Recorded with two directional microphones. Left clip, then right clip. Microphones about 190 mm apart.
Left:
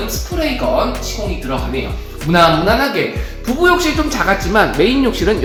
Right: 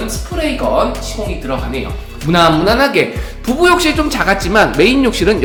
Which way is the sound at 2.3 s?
15° right (ahead or behind).